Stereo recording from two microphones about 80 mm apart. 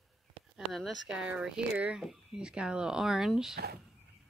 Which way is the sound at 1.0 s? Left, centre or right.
Centre.